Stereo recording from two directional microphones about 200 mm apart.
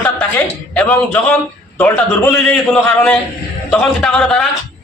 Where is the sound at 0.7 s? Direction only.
5° left (ahead or behind).